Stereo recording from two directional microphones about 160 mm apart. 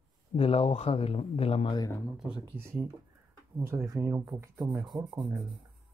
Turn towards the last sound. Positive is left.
turn(degrees=-25)  # may be behind; listen again after turning